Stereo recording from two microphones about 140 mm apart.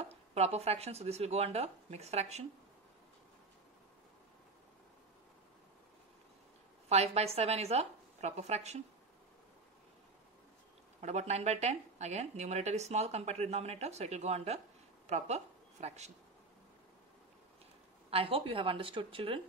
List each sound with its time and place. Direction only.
0.0 s speech: 50° right (ahead or behind)
6.9 s speech: 50° right (ahead or behind)
11.0 s speech: 55° right (ahead or behind)
18.1 s speech: 40° right (ahead or behind)